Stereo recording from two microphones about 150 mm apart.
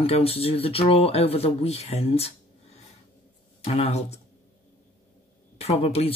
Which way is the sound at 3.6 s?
45° left (ahead or behind).